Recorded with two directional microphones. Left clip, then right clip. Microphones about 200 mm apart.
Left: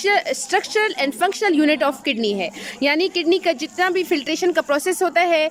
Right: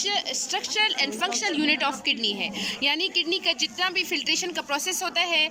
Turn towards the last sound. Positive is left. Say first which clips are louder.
# left 7 dB
turn(degrees=60)  # may be behind; listen again after turning